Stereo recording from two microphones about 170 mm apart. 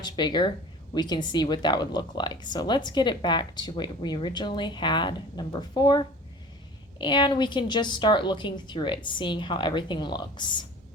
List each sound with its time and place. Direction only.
0.0 s speech: 25° left (ahead or behind)